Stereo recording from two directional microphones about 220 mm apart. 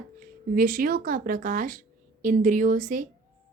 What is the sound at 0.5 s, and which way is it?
A woman's voice, 40° right (ahead or behind).